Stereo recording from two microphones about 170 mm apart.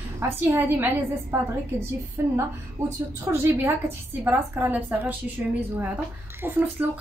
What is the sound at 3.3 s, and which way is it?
A woman's voice, 20° right (ahead or behind).